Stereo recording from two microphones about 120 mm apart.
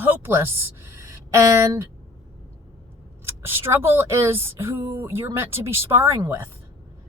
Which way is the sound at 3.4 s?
20° right (ahead or behind).